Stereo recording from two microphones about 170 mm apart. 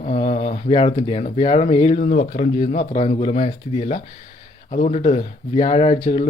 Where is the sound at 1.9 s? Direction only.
55° left (ahead or behind).